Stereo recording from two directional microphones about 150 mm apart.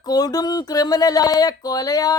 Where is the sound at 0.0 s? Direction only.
25° left (ahead or behind).